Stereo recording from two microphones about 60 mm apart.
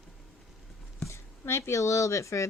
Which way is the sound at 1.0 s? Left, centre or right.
Left.